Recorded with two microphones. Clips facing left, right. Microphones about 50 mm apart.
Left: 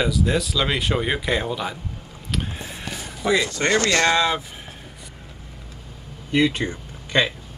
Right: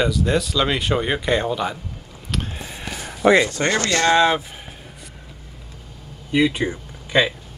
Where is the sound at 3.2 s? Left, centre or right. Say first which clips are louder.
Right 6 dB; right.